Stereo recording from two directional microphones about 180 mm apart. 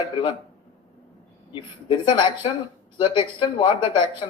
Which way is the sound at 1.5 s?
25° left (ahead or behind).